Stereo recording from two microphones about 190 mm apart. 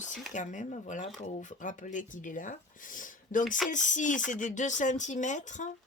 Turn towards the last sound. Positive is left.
turn(degrees=40)  # may be behind; listen again after turning